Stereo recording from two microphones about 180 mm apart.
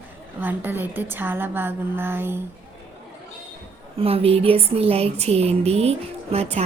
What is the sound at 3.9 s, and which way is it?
Speech, 35° right (ahead or behind).